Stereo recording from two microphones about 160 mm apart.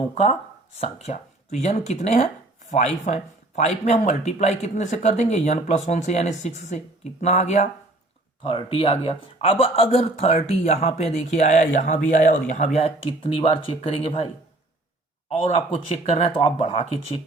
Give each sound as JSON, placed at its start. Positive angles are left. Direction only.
{"t": 0.1, "sound": "speech", "side_deg": 40}
{"t": 8.4, "sound": "speech", "side_deg": 35}
{"t": 15.3, "sound": "speech", "side_deg": 35}